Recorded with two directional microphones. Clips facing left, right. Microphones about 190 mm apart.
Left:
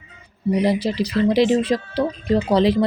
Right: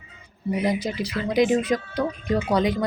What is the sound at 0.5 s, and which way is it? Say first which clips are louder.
Speech: left 5 dB; 35° left (ahead or behind).